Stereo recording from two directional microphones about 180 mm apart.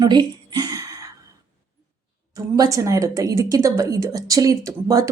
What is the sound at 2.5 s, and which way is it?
Speech, 20° right (ahead or behind).